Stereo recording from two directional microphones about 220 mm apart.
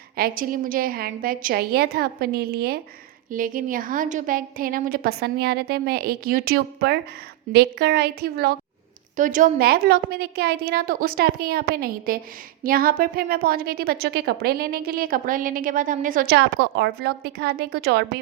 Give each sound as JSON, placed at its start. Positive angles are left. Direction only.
{"t": 0.2, "sound": "a woman's voice", "side_deg": -40}